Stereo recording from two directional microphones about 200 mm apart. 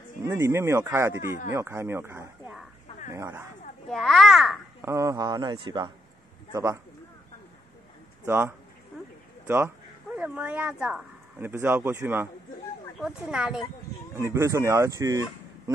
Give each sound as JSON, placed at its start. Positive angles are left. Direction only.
{"t": 0.2, "sound": "speech", "side_deg": -15}
{"t": 3.9, "sound": "a child's voice", "side_deg": 0}
{"t": 4.8, "sound": "speech", "side_deg": -15}
{"t": 8.3, "sound": "speech", "side_deg": -10}
{"t": 10.1, "sound": "a child's voice", "side_deg": -10}
{"t": 14.1, "sound": "speech", "side_deg": -15}